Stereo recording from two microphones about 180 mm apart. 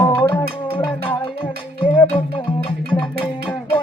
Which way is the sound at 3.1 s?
10° left (ahead or behind).